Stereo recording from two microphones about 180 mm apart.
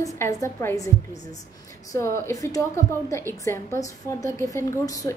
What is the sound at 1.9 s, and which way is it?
A woman's voice, 15° left (ahead or behind).